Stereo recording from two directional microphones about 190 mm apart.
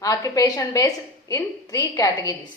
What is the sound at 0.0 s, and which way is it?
A woman's voice, 20° left (ahead or behind).